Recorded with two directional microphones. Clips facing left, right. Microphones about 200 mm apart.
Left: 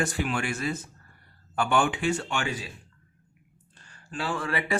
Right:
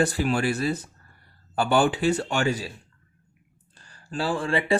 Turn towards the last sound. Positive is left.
turn(degrees=-30)  # may be behind; listen again after turning